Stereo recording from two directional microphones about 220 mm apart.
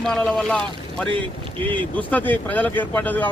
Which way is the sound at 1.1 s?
25° right (ahead or behind).